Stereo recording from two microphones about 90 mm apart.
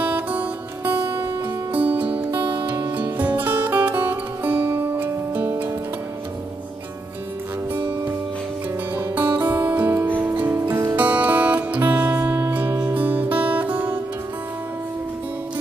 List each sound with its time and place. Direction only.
0.0 s music: 20° right (ahead or behind)
8.9 s music: 20° right (ahead or behind)
10.7 s music: 30° right (ahead or behind)
11.0 s music: 15° right (ahead or behind)
11.8 s music: 30° right (ahead or behind)